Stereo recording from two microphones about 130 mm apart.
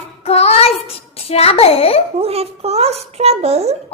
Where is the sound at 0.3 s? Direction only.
50° left (ahead or behind).